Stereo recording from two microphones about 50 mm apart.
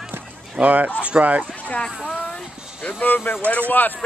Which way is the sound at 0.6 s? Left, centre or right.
Right.